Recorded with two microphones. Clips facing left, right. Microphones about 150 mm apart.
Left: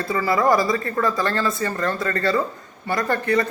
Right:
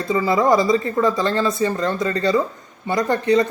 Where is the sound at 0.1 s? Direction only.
20° right (ahead or behind).